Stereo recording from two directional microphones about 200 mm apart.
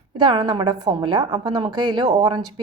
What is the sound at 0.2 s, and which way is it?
A woman's voice, 20° right (ahead or behind).